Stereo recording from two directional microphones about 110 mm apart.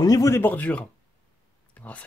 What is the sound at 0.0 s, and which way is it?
Speech, 30° left (ahead or behind).